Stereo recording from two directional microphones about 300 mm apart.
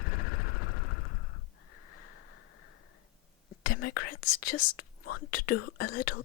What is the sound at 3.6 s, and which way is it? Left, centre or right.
Whispering, left.